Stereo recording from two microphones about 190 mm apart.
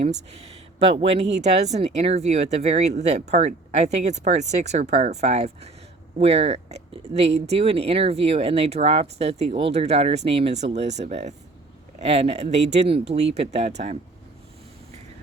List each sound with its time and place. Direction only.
0.0 s speech: 35° right (ahead or behind)